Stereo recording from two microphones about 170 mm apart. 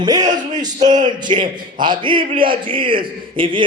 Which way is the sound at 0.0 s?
25° right (ahead or behind).